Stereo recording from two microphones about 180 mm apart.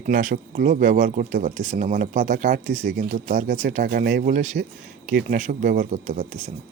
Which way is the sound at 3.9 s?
55° right (ahead or behind).